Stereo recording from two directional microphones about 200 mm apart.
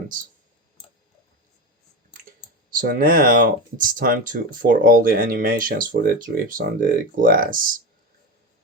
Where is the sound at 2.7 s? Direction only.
45° right (ahead or behind).